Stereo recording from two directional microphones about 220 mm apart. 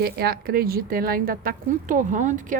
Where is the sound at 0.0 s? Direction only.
45° right (ahead or behind).